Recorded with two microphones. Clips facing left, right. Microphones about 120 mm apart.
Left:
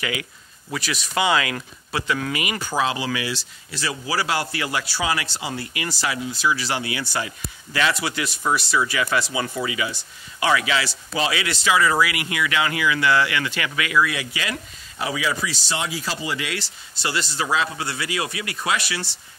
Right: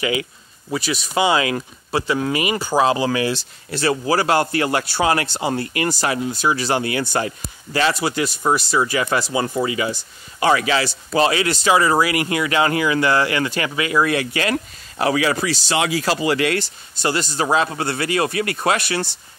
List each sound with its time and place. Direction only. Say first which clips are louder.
0.0 s speech: right 6 dB; 25° right (ahead or behind)
3.3 s a man's voice: right 6 dB; 55° right (ahead or behind); by 14.0 s 35° right (ahead or behind)
14.0 s a man's voice: right 7 dB; 50° right (ahead or behind)